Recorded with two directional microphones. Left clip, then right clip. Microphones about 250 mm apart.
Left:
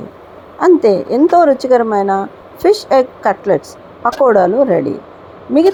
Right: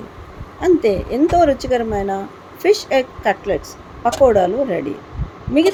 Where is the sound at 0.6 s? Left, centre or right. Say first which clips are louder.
Left 6 dB; centre.